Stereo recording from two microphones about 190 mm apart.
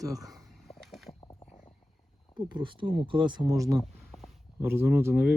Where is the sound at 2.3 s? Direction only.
25° right (ahead or behind).